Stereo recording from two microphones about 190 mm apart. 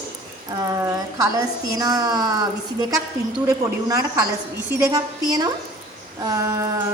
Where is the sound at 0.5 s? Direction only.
20° right (ahead or behind).